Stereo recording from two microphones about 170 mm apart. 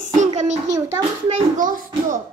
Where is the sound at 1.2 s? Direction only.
45° right (ahead or behind).